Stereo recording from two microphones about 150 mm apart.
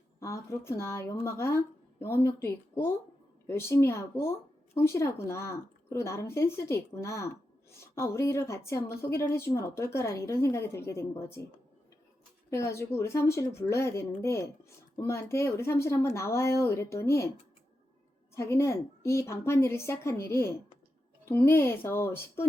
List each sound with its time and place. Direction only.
0.2 s a woman's voice: 20° left (ahead or behind)
12.5 s a woman's voice: 20° left (ahead or behind)
18.3 s a woman's voice: 15° left (ahead or behind)